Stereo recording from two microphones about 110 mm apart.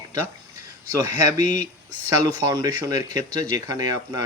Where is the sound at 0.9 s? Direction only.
30° right (ahead or behind).